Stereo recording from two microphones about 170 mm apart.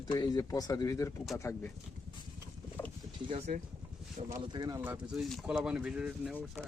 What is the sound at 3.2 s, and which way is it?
Speech, 40° right (ahead or behind).